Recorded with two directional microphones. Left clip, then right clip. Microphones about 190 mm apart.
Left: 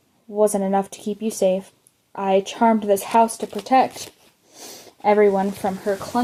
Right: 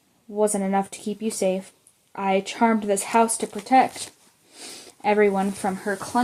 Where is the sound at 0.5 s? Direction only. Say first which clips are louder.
Left 3 dB; 35° left (ahead or behind).